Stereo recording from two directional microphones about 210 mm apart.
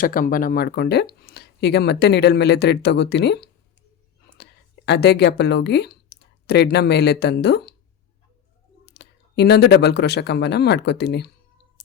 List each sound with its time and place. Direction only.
0.0 s speech: 40° left (ahead or behind)
4.9 s speech: 50° left (ahead or behind)
8.9 s speech: 55° left (ahead or behind)